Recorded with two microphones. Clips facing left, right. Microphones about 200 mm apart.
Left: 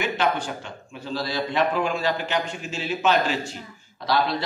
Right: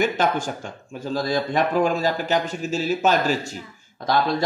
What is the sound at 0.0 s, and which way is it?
Speech, 45° right (ahead or behind).